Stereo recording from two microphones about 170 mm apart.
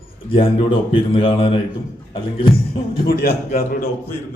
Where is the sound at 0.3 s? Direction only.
30° left (ahead or behind).